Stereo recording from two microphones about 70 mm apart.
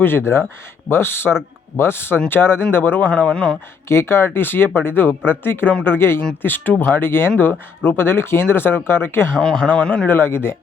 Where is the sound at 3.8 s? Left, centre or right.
Left.